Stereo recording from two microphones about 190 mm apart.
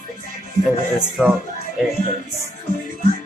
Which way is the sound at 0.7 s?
Centre (ahead or behind).